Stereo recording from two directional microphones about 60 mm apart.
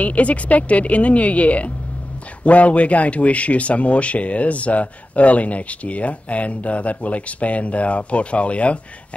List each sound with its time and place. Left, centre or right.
0.0 s speech: left